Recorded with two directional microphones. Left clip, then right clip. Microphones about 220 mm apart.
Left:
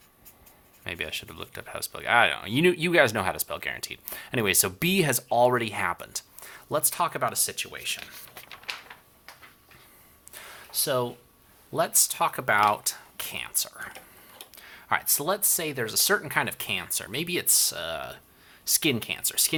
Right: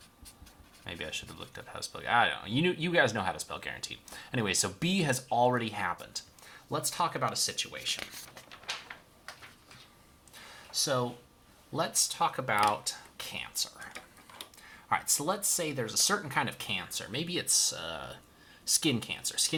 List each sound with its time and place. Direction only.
0.9 s speech: 45° left (ahead or behind)
10.3 s a sound: 50° left (ahead or behind)
10.8 s speech: 35° left (ahead or behind)
11.7 s speech: 50° left (ahead or behind)